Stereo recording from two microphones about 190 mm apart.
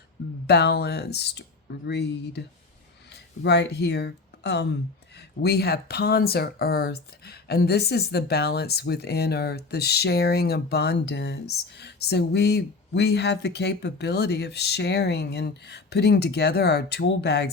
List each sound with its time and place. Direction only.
0.4 s speech: 60° left (ahead or behind)
3.4 s speech: 60° left (ahead or behind)